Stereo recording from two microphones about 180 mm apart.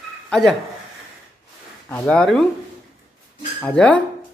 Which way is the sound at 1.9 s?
5° left (ahead or behind).